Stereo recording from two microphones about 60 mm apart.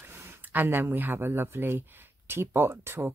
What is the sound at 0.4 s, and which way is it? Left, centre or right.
Speech, right.